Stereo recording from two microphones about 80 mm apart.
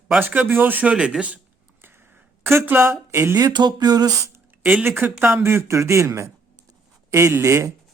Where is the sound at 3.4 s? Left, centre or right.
Right.